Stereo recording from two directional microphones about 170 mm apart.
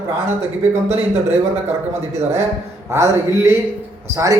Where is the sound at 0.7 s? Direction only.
40° right (ahead or behind).